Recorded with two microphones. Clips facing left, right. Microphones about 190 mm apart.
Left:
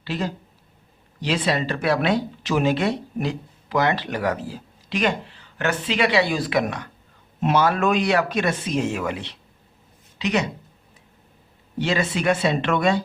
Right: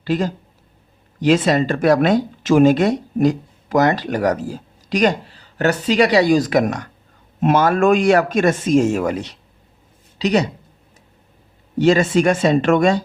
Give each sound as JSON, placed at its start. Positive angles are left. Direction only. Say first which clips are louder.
{"t": 0.0, "sound": "speech", "louder": "right 7 dB", "side_deg": -45}
{"t": 11.8, "sound": "speech", "louder": "right 9 dB", "side_deg": -45}